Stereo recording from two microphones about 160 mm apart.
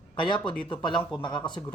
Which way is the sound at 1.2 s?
30° left (ahead or behind).